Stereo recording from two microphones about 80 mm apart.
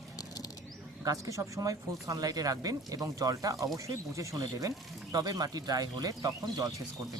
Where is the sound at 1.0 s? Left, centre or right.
Right.